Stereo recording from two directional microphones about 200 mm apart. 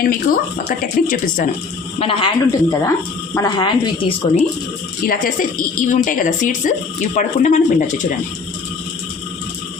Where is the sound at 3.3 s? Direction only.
20° left (ahead or behind).